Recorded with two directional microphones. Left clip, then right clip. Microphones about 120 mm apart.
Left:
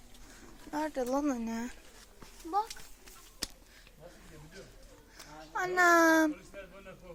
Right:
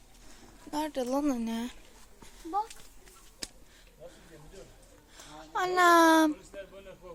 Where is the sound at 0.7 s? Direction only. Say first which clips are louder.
Right 1 dB; 40° right (ahead or behind).